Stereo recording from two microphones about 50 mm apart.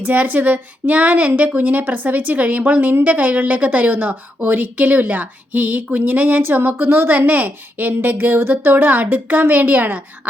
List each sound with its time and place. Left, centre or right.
0.0 s a woman's voice: right